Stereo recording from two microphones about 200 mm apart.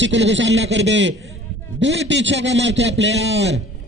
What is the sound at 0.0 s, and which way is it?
A man's voice, 65° right (ahead or behind).